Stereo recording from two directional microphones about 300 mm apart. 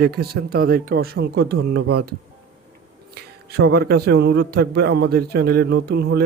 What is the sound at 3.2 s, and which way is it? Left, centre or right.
Speech, right.